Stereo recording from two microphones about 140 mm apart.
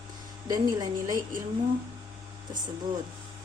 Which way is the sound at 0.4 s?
25° right (ahead or behind).